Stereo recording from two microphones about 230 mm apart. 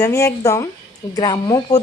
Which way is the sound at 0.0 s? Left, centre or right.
Centre.